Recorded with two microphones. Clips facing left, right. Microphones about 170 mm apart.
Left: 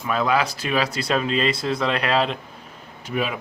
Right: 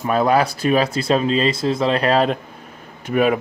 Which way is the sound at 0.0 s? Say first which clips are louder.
Right 5 dB; 40° right (ahead or behind).